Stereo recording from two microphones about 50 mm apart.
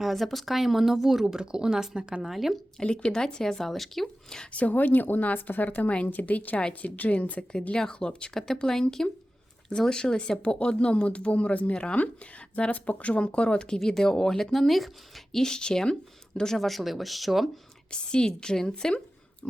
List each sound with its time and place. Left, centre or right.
0.0 s speech: centre
2.2 s speech: centre
2.7 s speech: centre
4.5 s speech: left; by 17.5 s centre
17.9 s speech: centre